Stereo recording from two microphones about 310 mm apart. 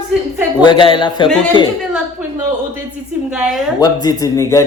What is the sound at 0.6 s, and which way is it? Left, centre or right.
Speech, centre.